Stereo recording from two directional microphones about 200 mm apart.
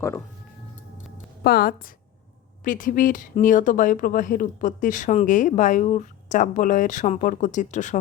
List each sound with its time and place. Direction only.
1.5 s a woman's voice: 45° left (ahead or behind)